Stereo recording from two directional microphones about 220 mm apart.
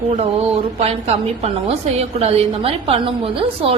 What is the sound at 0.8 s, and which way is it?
A woman's voice, 30° right (ahead or behind).